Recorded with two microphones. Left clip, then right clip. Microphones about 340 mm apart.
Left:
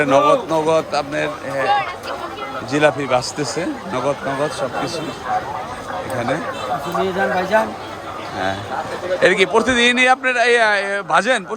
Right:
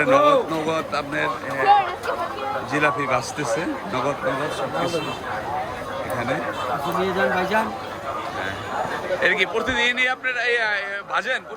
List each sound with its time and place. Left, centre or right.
0.0 s a man's voice: centre
1.6 s speech: centre
2.7 s a man's voice: centre
7.5 s a man's voice: centre
9.2 s a man's voice: centre